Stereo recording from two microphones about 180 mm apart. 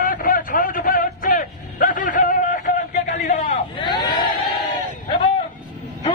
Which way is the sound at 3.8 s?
25° left (ahead or behind).